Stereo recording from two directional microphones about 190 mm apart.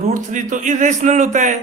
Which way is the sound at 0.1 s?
40° right (ahead or behind).